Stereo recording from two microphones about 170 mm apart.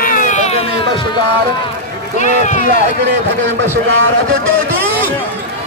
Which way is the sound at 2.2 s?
45° left (ahead or behind).